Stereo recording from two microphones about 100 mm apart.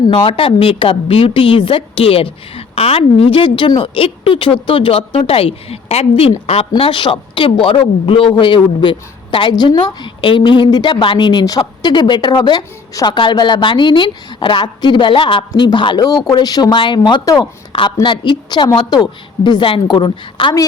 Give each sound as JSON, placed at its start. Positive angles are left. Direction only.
{"t": 0.1, "sound": "a woman's voice", "side_deg": 60}
{"t": 16.0, "sound": "speech", "side_deg": 40}
{"t": 16.7, "sound": "a woman's voice", "side_deg": 50}
{"t": 17.2, "sound": "speech", "side_deg": 35}
{"t": 17.7, "sound": "a woman's voice", "side_deg": 55}